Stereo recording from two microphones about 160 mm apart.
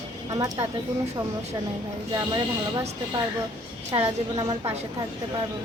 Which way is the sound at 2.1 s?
25° right (ahead or behind).